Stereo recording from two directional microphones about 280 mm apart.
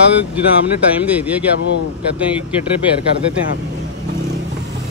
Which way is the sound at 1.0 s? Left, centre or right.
Centre.